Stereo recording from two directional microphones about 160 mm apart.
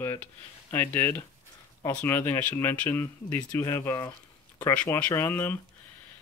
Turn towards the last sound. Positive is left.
turn(degrees=15)  # may be behind; listen again after turning